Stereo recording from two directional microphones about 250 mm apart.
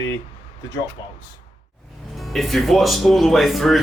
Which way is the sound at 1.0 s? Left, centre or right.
Centre.